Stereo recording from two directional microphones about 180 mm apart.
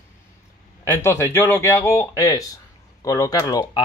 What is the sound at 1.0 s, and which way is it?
Speech, 15° left (ahead or behind).